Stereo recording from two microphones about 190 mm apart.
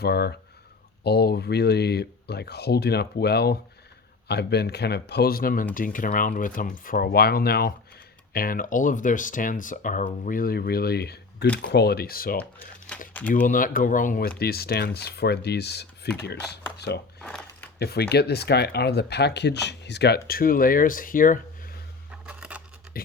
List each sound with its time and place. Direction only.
0.0 s speech: 55° left (ahead or behind)
12.4 s speech: 10° left (ahead or behind)
13.5 s speech: 45° left (ahead or behind)
17.2 s a sound: 5° left (ahead or behind)
17.7 s speech: 55° left (ahead or behind)
22.3 s a sound: 5° right (ahead or behind)